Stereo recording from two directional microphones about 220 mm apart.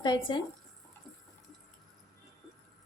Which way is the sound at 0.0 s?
20° left (ahead or behind).